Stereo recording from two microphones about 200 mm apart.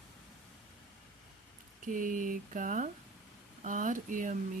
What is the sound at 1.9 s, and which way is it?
Speech, 40° right (ahead or behind).